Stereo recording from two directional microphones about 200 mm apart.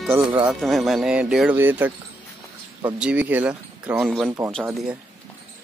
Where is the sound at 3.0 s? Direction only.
5° right (ahead or behind).